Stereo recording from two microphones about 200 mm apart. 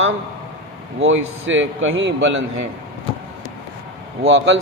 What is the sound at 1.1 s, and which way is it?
Speech, 70° right (ahead or behind).